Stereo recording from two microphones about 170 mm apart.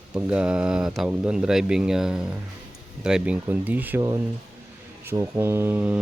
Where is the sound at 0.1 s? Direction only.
5° right (ahead or behind).